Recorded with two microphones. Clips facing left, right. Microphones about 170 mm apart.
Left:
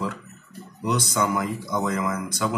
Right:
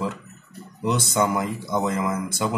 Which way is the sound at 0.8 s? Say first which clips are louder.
Right 2 dB; 25° right (ahead or behind).